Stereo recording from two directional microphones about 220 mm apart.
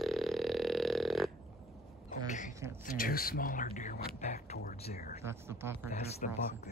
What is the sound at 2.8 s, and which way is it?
Whispering, 40° left (ahead or behind).